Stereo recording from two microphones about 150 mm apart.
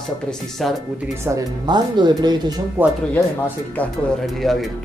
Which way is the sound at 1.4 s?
30° right (ahead or behind).